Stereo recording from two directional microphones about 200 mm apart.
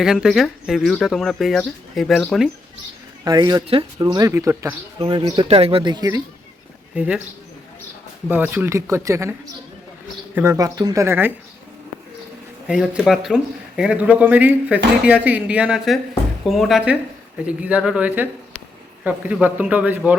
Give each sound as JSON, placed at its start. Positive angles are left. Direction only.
{"t": 0.0, "sound": "speech", "side_deg": -5}
{"t": 3.2, "sound": "speech", "side_deg": -20}
{"t": 6.9, "sound": "a man's voice", "side_deg": -5}
{"t": 8.3, "sound": "a man's voice", "side_deg": -10}
{"t": 10.3, "sound": "a man's voice", "side_deg": -10}
{"t": 12.6, "sound": "a man's voice", "side_deg": -5}